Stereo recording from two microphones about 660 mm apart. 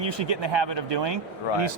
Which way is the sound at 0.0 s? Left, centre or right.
Right.